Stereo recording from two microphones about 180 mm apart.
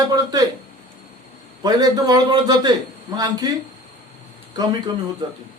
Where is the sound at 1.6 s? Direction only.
20° right (ahead or behind).